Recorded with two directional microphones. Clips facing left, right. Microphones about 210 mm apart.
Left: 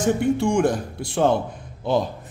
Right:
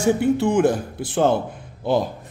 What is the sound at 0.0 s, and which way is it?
Speech, 5° right (ahead or behind).